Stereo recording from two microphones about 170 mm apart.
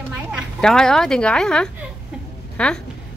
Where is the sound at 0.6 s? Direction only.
5° left (ahead or behind).